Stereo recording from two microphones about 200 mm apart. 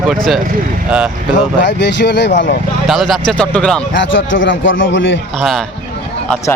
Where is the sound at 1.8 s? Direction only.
60° left (ahead or behind).